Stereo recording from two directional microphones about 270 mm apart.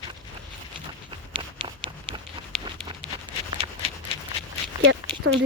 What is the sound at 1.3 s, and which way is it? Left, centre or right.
Run, centre.